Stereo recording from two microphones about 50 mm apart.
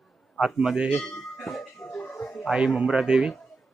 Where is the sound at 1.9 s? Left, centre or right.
Centre.